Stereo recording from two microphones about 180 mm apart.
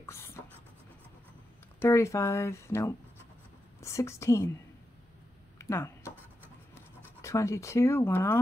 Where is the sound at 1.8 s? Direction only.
15° left (ahead or behind).